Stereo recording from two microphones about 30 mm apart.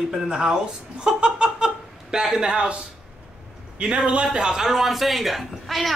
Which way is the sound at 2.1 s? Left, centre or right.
Centre.